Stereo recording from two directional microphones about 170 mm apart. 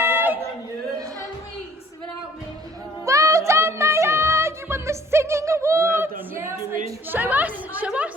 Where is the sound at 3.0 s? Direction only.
15° right (ahead or behind).